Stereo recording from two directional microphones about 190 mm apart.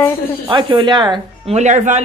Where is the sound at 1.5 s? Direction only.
40° right (ahead or behind).